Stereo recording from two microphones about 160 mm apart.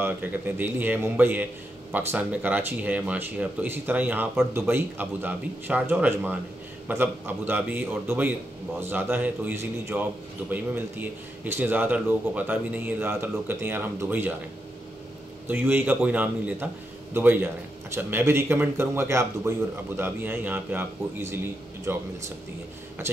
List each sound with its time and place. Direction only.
0.0 s a man's voice: 10° right (ahead or behind)
15.4 s a man's voice: 10° right (ahead or behind)